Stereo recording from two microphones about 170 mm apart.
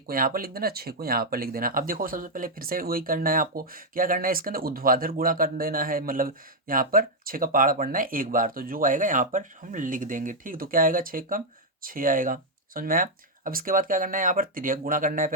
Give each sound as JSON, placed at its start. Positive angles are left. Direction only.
{"t": 0.1, "sound": "speech", "side_deg": -60}